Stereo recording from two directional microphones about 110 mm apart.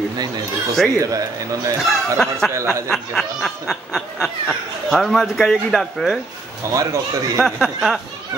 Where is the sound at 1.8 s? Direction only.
Centre (ahead or behind).